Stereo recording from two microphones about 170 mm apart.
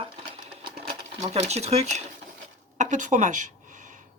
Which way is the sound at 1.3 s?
40° right (ahead or behind).